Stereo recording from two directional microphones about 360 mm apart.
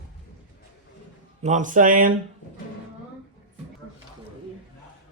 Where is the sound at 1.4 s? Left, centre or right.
Centre.